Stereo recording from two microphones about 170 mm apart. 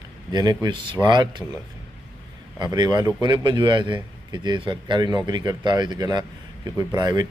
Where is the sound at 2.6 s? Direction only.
25° right (ahead or behind).